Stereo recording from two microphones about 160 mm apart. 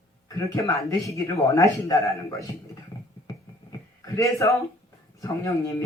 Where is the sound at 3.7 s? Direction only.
20° left (ahead or behind).